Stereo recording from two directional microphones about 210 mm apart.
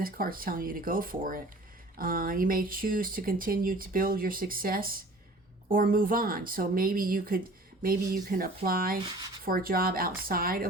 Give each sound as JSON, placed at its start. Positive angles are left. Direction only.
{"t": 0.0, "sound": "speech", "side_deg": -45}